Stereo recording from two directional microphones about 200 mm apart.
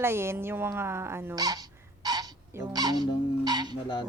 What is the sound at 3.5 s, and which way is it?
Music, 20° right (ahead or behind).